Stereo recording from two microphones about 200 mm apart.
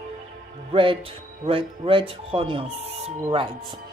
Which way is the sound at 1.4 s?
25° right (ahead or behind).